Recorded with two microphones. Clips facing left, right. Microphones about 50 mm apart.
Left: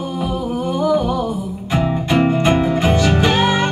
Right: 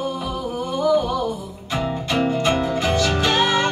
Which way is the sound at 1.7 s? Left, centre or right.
Left.